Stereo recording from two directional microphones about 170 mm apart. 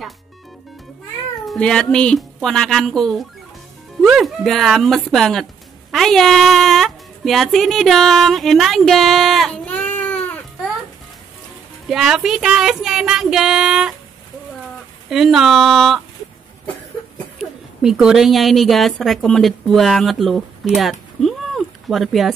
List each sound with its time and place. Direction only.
1.5 s a woman's voice: 5° left (ahead or behind)
11.9 s a woman's voice: centre (ahead or behind)
15.0 s a woman's voice: centre (ahead or behind)
17.4 s a woman's voice: 5° right (ahead or behind)
20.7 s a sound: centre (ahead or behind)